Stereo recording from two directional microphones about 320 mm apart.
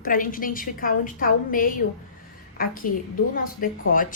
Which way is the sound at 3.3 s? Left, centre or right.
Left.